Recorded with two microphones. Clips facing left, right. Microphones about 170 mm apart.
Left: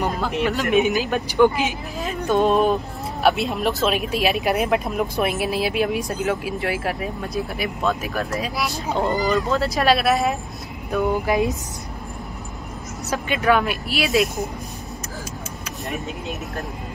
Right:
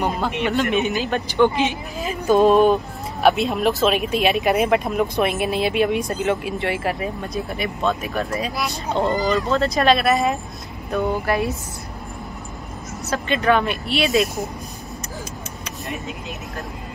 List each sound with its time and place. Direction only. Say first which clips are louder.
0.4 s speech: left 2 dB; centre (ahead or behind)
11.2 s speech: left 1 dB; 15° left (ahead or behind)
13.1 s speech: right 1 dB; 10° left (ahead or behind)